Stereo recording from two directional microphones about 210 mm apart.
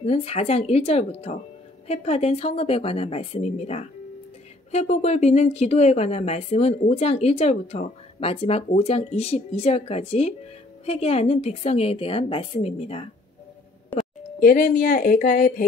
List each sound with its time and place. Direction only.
0.0 s speech: 30° left (ahead or behind)
14.4 s speech: 40° left (ahead or behind)